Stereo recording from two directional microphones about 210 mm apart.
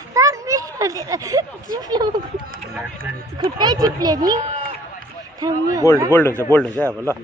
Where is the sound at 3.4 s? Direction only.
20° right (ahead or behind).